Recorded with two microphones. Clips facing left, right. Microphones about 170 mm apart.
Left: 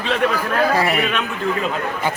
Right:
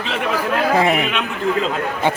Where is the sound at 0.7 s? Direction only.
20° right (ahead or behind).